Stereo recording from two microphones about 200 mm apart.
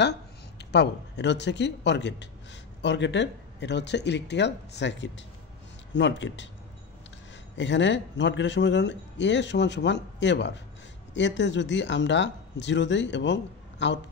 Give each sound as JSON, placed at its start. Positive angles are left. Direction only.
{"t": 0.6, "sound": "a man's voice", "side_deg": 60}
{"t": 7.5, "sound": "a man's voice", "side_deg": 65}